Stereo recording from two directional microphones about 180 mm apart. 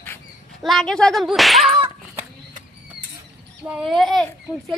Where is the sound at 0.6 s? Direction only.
Centre (ahead or behind).